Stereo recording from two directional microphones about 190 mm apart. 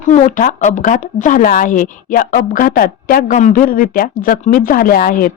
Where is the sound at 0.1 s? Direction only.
40° left (ahead or behind).